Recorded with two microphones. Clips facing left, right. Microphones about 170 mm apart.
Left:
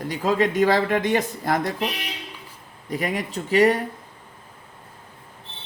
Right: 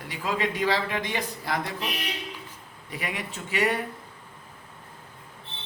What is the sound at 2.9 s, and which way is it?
Speech, 40° left (ahead or behind).